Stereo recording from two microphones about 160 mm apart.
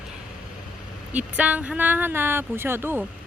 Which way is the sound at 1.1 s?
10° right (ahead or behind).